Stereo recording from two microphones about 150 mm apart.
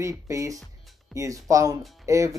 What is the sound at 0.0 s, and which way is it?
Speech, 20° right (ahead or behind).